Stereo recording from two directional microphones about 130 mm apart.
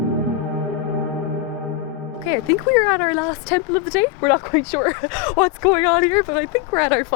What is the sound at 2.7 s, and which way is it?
Speech, 15° left (ahead or behind).